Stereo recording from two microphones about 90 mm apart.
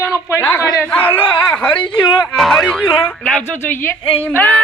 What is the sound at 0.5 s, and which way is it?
Speech, 40° left (ahead or behind).